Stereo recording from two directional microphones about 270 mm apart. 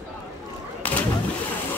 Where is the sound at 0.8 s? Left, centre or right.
Centre.